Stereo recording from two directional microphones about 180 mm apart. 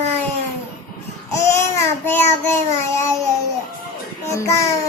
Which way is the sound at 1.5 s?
15° left (ahead or behind).